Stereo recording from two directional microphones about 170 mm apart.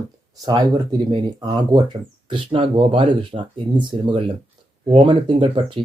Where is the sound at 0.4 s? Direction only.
25° right (ahead or behind).